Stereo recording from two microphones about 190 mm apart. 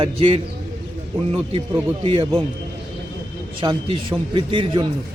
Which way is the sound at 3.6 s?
25° right (ahead or behind).